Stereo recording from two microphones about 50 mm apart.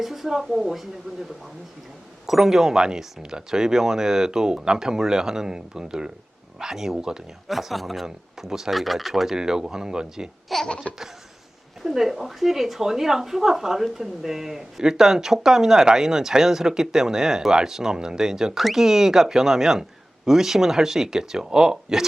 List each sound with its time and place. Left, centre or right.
0.0 s speech: centre
2.2 s speech: centre
7.4 s speech: centre
9.3 s speech: centre
10.5 s speech: centre
11.8 s speech: centre